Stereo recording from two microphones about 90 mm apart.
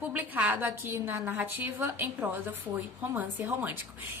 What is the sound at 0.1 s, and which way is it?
A woman's voice, 20° right (ahead or behind).